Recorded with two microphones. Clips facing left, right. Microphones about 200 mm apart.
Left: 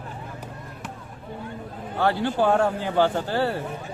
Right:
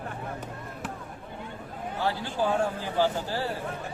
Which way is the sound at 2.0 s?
65° left (ahead or behind).